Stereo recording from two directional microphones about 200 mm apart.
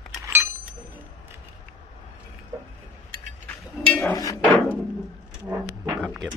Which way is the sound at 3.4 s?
5° left (ahead or behind).